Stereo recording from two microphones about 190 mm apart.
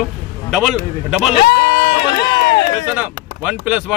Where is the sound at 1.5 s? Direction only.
60° left (ahead or behind).